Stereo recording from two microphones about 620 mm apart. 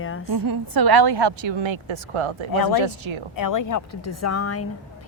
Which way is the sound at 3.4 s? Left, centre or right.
Left.